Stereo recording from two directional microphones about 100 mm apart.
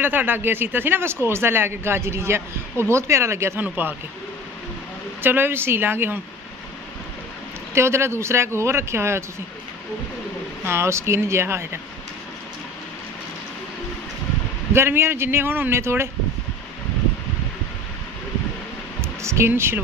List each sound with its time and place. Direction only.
0.0 s a man's voice: 20° right (ahead or behind)
5.2 s a man's voice: 20° right (ahead or behind)
7.7 s a man's voice: 25° right (ahead or behind)
10.6 s a man's voice: 25° right (ahead or behind)
14.7 s a man's voice: 25° right (ahead or behind)
18.9 s speech: 25° right (ahead or behind)